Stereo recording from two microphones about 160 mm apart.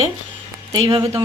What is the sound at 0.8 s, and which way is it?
Speech, 35° right (ahead or behind).